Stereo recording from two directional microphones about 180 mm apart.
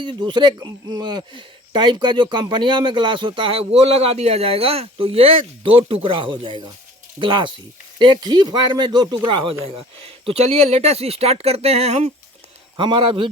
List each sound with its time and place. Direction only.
0.0 s speech: 25° right (ahead or behind)
12.7 s speech: 25° right (ahead or behind)